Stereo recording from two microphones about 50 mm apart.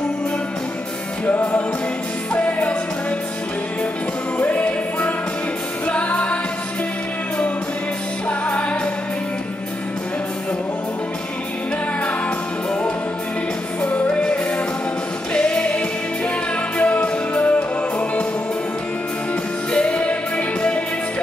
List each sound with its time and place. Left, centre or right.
1.2 s music: left
4.4 s music: left
8.3 s music: left
13.8 s music: left
19.7 s music: left